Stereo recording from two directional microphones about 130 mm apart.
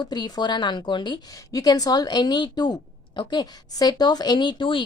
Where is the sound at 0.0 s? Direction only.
35° left (ahead or behind).